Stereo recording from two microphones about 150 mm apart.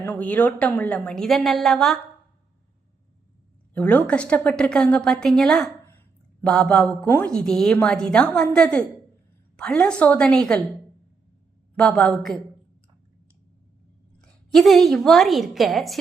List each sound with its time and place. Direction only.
0.0 s a woman's voice: 10° left (ahead or behind)
3.8 s a woman's voice: 10° left (ahead or behind)
11.8 s a woman's voice: 5° left (ahead or behind)
14.2 s a woman's voice: 5° left (ahead or behind)